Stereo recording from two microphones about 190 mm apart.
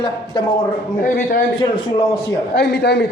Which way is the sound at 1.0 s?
45° left (ahead or behind).